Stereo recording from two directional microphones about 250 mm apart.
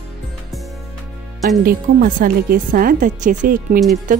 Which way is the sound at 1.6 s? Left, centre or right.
Right.